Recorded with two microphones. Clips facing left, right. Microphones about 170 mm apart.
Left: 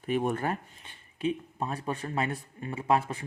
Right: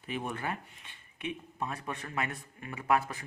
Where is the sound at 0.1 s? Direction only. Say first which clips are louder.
Left 7 dB; 45° left (ahead or behind).